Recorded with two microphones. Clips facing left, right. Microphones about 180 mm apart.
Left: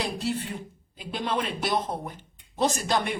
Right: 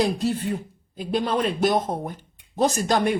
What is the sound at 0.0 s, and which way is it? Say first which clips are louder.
A woman's voice: right 7 dB; 40° right (ahead or behind).